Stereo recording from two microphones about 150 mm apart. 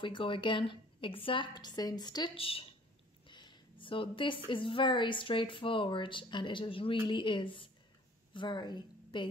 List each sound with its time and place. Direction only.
0.0 s a woman's voice: 35° left (ahead or behind)
3.3 s a sound: 30° left (ahead or behind)
4.5 s a woman's voice: 35° left (ahead or behind)